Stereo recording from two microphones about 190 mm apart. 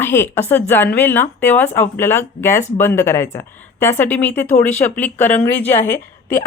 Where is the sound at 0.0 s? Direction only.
10° left (ahead or behind).